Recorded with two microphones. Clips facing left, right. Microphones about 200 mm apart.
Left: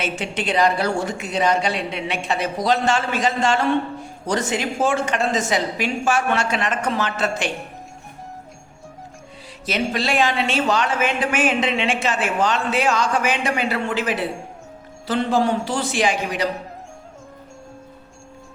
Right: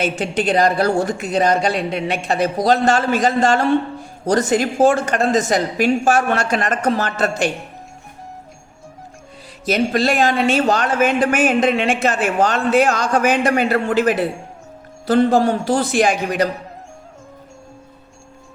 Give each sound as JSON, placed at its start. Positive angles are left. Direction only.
{"t": 0.0, "sound": "speech", "side_deg": -40}
{"t": 9.6, "sound": "speech", "side_deg": -45}